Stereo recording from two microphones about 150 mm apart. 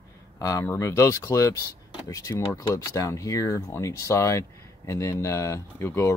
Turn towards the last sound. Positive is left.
turn(degrees=15)  # may be behind; listen again after turning